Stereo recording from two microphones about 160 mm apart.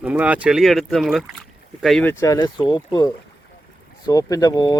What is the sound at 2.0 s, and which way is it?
Speech, 15° left (ahead or behind).